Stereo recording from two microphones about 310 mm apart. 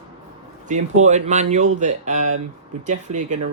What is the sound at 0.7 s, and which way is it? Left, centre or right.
Speech, right.